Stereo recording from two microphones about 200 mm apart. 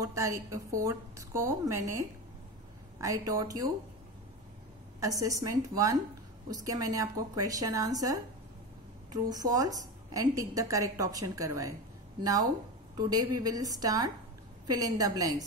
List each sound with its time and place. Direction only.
0.0 s a woman's voice: 15° right (ahead or behind)
5.0 s a woman's voice: 15° right (ahead or behind)